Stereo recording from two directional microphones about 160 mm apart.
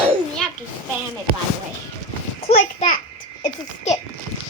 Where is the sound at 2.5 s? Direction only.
50° left (ahead or behind).